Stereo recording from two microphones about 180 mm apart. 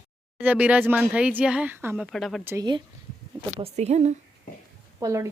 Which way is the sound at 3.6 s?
35° right (ahead or behind).